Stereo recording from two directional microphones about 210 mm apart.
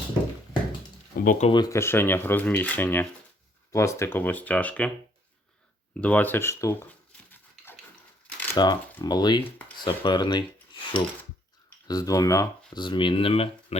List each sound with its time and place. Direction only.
1.2 s speech: 40° left (ahead or behind)
1.5 s speech: 20° left (ahead or behind)
6.0 s speech: 5° left (ahead or behind)
7.3 s dog: 10° left (ahead or behind)
8.5 s speech: 20° left (ahead or behind)
9.8 s cutlery: 20° left (ahead or behind)
11.9 s speech: 15° left (ahead or behind)